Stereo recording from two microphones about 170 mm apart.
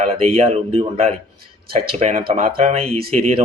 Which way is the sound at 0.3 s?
35° right (ahead or behind).